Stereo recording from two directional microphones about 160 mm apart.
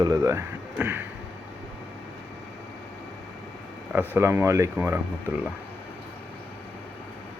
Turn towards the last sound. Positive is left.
turn(degrees=-15)  # may be behind; listen again after turning